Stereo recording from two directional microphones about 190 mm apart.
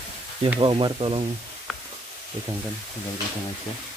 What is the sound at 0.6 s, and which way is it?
Speech, 25° right (ahead or behind).